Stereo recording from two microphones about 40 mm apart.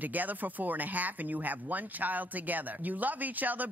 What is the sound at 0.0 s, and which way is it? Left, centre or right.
Speech, right.